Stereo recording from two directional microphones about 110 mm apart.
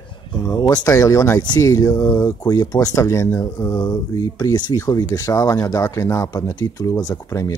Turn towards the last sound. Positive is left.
turn(degrees=30)  # may be behind; listen again after turning